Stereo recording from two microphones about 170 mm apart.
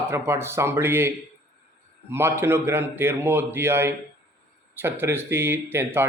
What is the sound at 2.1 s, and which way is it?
A man's voice, 15° right (ahead or behind).